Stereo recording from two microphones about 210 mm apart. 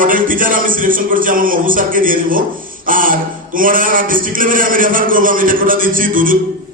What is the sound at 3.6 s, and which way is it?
A man's voice, 40° right (ahead or behind).